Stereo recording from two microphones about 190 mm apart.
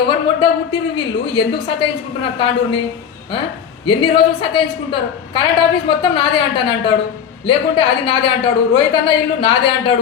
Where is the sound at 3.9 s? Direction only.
25° left (ahead or behind).